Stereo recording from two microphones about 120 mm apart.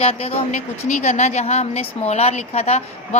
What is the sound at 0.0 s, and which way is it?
A woman's voice, 55° left (ahead or behind).